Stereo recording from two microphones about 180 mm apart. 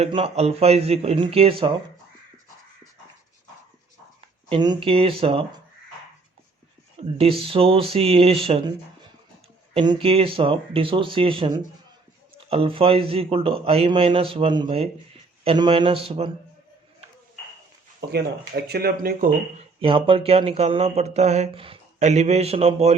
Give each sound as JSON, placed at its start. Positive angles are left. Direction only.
{"t": 0.0, "sound": "speech", "side_deg": -35}
{"t": 4.4, "sound": "speech", "side_deg": -25}
{"t": 7.2, "sound": "speech", "side_deg": -30}
{"t": 9.7, "sound": "speech", "side_deg": -25}
{"t": 18.1, "sound": "speech", "side_deg": -65}
{"t": 19.8, "sound": "speech", "side_deg": -30}